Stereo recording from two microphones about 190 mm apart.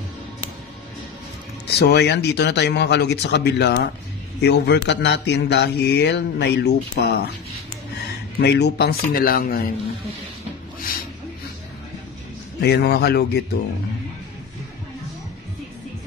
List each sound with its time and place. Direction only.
1.7 s speech: 60° left (ahead or behind)
8.4 s speech: 60° left (ahead or behind)
12.5 s speech: 60° left (ahead or behind)